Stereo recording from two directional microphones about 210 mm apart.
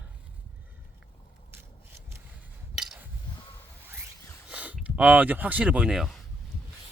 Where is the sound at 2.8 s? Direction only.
5° right (ahead or behind).